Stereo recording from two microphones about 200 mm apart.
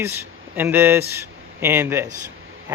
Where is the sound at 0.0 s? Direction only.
10° right (ahead or behind).